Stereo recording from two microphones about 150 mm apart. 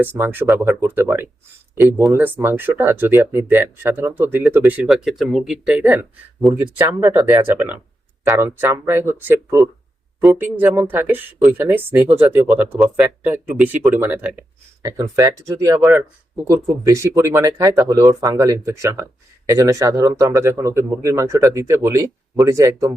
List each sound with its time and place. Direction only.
0.0 s speech: 15° right (ahead or behind)
6.6 s speech: 15° right (ahead or behind)
14.8 s speech: 20° right (ahead or behind)